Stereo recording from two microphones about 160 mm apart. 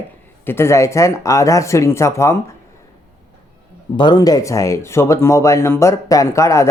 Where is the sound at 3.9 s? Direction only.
30° left (ahead or behind).